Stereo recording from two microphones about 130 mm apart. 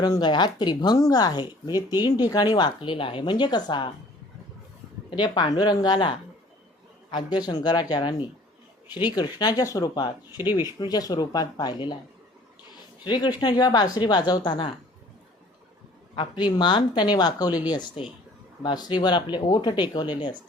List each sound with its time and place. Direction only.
0.0 s speech: 30° left (ahead or behind)
5.1 s speech: 35° left (ahead or behind)
13.1 s speech: 35° left (ahead or behind)
16.1 s speech: 35° left (ahead or behind)
18.0 s speech: 45° left (ahead or behind)